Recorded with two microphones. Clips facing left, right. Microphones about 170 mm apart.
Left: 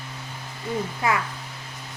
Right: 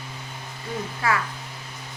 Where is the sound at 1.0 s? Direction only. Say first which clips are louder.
Even; 20° left (ahead or behind).